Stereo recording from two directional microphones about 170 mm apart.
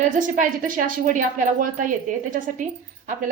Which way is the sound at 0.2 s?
50° right (ahead or behind).